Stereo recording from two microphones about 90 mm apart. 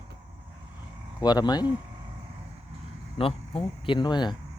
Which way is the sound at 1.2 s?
50° left (ahead or behind).